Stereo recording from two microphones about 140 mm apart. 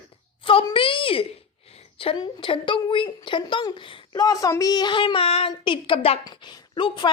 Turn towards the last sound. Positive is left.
turn(degrees=35)  # may be behind; listen again after turning